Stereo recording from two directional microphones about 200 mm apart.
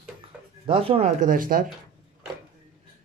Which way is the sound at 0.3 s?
5° right (ahead or behind).